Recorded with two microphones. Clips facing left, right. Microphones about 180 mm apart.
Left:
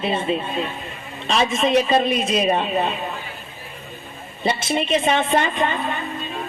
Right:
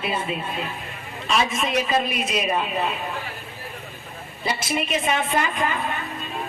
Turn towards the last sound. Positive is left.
turn(degrees=30)  # may be behind; listen again after turning